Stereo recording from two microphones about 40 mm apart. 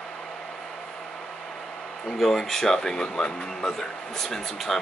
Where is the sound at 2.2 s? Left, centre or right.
Centre.